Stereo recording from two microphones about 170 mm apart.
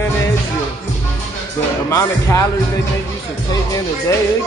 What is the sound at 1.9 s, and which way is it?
Speech, 15° left (ahead or behind).